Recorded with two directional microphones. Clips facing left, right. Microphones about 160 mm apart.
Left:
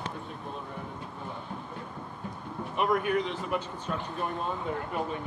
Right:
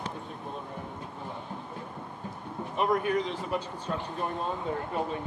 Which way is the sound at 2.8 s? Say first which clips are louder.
Even; 30° right (ahead or behind).